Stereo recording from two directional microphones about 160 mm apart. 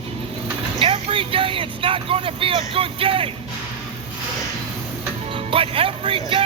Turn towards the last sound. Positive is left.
turn(degrees=-35)  # may be behind; listen again after turning